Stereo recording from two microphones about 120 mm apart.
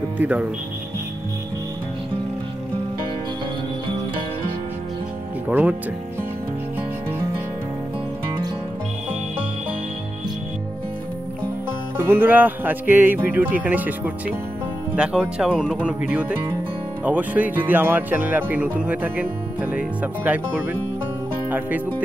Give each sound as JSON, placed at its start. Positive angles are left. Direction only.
{"t": 0.2, "sound": "speech", "side_deg": -10}
{"t": 5.5, "sound": "speech", "side_deg": -15}
{"t": 12.0, "sound": "speech", "side_deg": -15}